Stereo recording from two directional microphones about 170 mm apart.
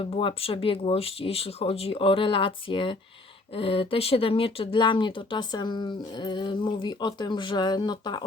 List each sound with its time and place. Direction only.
0.0 s speech: 30° left (ahead or behind)